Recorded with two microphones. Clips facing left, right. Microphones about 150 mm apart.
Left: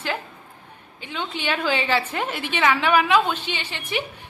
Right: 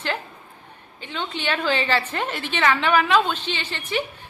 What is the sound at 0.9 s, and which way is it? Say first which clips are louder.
A woman's voice: even; 10° left (ahead or behind).